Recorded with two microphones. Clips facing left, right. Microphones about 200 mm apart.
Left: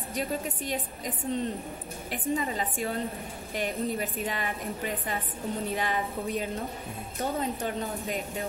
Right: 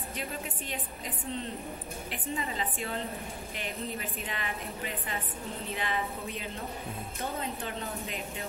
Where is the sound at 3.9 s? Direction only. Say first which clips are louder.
Left 6 dB; 45° left (ahead or behind).